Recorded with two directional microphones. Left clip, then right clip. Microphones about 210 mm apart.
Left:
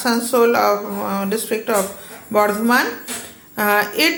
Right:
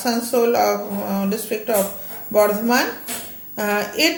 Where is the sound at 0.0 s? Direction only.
20° left (ahead or behind).